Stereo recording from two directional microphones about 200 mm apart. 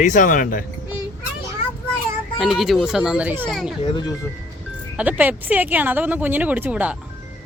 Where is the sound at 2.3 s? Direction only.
Centre (ahead or behind).